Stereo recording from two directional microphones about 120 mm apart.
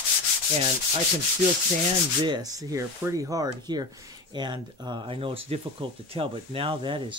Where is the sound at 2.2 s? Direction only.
35° right (ahead or behind).